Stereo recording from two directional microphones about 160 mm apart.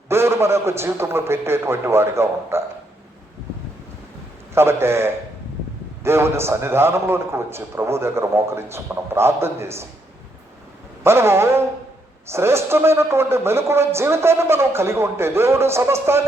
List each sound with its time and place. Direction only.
0.1 s speech: 15° right (ahead or behind)
4.5 s speech: 15° right (ahead or behind)
11.0 s speech: 15° right (ahead or behind)